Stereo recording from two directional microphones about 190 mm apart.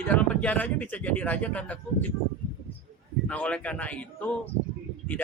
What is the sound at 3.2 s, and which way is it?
A man's voice, 5° left (ahead or behind).